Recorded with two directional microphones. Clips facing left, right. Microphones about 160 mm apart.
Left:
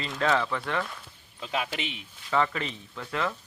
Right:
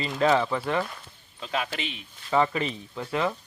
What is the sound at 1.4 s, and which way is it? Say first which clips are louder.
Speech: right 1 dB; 10° left (ahead or behind).